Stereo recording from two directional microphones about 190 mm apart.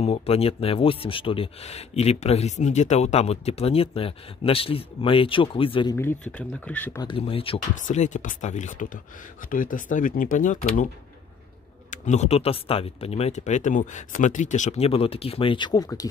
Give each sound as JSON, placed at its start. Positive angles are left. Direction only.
{"t": 0.0, "sound": "speech", "side_deg": 30}
{"t": 5.9, "sound": "speech", "side_deg": 10}
{"t": 7.0, "sound": "speech", "side_deg": 25}
{"t": 7.8, "sound": "speech", "side_deg": 40}
{"t": 11.9, "sound": "speech", "side_deg": 35}